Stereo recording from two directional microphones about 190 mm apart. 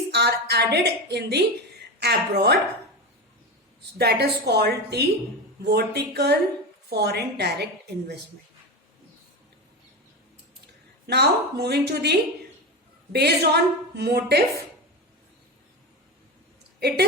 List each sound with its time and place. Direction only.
0.1 s a woman's voice: 60° right (ahead or behind)
3.9 s a woman's voice: 55° right (ahead or behind)
11.0 s a woman's voice: 60° right (ahead or behind)